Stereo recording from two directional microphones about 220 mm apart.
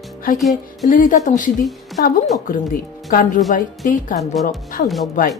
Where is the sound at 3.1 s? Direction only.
40° left (ahead or behind).